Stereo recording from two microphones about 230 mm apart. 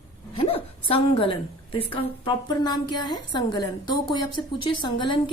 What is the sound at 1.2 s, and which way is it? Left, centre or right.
A woman's voice, left.